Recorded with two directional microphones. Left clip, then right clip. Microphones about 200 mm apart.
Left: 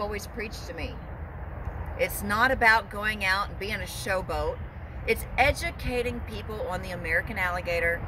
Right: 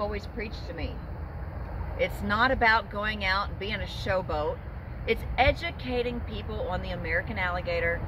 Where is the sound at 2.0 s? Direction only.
15° left (ahead or behind).